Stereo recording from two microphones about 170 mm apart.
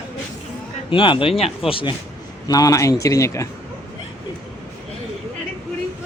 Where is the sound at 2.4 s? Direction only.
20° left (ahead or behind).